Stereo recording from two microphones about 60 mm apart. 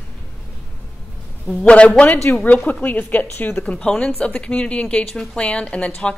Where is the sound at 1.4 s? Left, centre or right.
Centre.